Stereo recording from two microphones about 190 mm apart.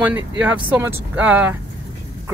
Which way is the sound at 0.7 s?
10° right (ahead or behind).